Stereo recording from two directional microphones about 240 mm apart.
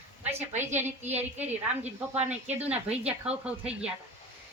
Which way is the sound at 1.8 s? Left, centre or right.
Right.